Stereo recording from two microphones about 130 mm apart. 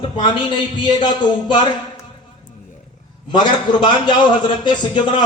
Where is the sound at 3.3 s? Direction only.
35° left (ahead or behind).